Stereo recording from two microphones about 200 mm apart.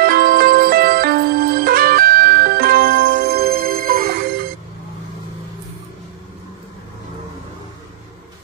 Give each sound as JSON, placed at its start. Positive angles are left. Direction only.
{"t": 0.0, "sound": "music", "side_deg": -50}